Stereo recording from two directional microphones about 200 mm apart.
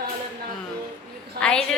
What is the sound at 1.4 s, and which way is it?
Speech, 5° left (ahead or behind).